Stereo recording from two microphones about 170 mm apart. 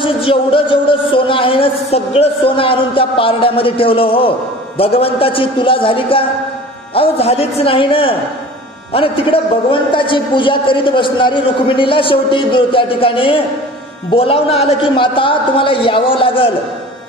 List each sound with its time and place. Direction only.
0.0 s a man's voice: 30° left (ahead or behind)